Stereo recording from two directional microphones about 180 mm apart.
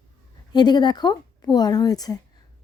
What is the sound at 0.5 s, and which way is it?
Speech, 25° left (ahead or behind).